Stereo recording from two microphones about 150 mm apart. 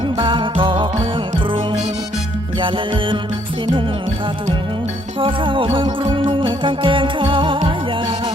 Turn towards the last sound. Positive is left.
turn(degrees=-35)  # may be behind; listen again after turning